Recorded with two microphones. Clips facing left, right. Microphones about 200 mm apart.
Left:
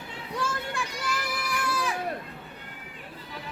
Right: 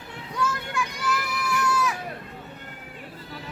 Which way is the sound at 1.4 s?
30° left (ahead or behind).